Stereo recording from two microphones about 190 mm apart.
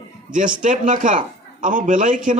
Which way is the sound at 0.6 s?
45° right (ahead or behind).